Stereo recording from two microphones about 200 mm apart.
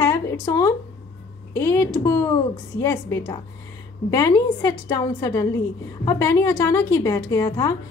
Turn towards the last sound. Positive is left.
turn(degrees=20)  # may be behind; listen again after turning